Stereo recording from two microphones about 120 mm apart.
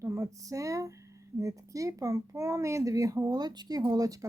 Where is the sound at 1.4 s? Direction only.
25° right (ahead or behind).